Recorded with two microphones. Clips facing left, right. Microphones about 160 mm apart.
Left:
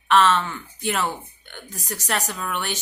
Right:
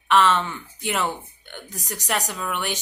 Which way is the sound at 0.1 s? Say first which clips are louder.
Left 1 dB; 15° right (ahead or behind).